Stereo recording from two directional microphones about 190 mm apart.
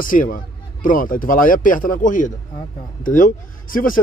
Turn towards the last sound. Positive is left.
turn(degrees=45)  # may be behind; listen again after turning